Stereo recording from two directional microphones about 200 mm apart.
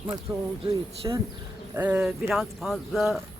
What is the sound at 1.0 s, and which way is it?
Speech, 15° right (ahead or behind).